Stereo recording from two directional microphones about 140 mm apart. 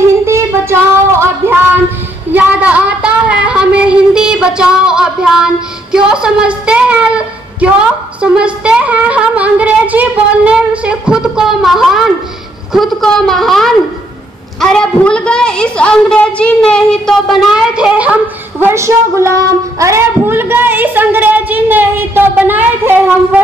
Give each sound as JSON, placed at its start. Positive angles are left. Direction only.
{"t": 0.2, "sound": "a sound", "side_deg": -20}
{"t": 8.2, "sound": "a woman's voice", "side_deg": -5}
{"t": 18.6, "sound": "speech", "side_deg": -20}